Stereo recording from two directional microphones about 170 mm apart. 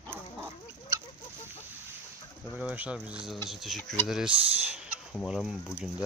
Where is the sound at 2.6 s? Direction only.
5° right (ahead or behind).